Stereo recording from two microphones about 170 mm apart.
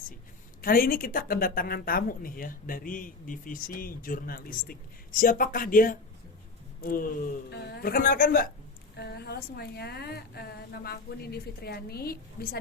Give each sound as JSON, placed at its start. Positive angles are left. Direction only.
{"t": 0.6, "sound": "speech", "side_deg": 60}
{"t": 7.5, "sound": "speech", "side_deg": 75}
{"t": 9.0, "sound": "a woman's voice", "side_deg": 70}